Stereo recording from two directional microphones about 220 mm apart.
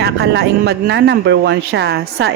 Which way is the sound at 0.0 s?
50° right (ahead or behind).